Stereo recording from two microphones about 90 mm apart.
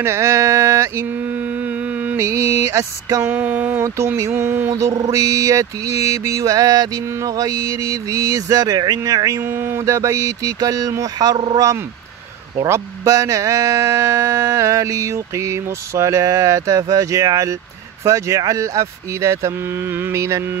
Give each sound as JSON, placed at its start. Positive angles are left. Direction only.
{"t": 0.0, "sound": "mantra", "side_deg": -30}
{"t": 2.1, "sound": "mantra", "side_deg": -35}
{"t": 3.3, "sound": "a sound", "side_deg": -20}
{"t": 4.2, "sound": "mantra", "side_deg": -30}
{"t": 9.5, "sound": "mantra", "side_deg": -25}